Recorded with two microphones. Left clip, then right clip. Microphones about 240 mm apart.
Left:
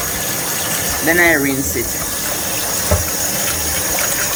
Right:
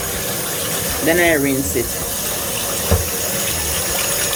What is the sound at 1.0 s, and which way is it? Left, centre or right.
Speech, centre.